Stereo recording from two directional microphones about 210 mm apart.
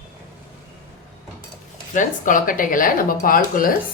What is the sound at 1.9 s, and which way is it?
Speech, 40° left (ahead or behind).